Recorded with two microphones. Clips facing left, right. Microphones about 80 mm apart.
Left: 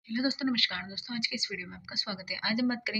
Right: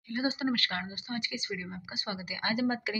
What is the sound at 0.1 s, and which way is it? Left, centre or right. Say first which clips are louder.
A woman's voice: left 1 dB; right.